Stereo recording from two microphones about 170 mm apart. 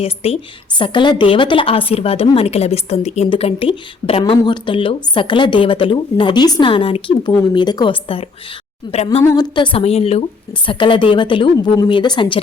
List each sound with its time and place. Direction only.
0.0 s a woman's voice: 35° left (ahead or behind)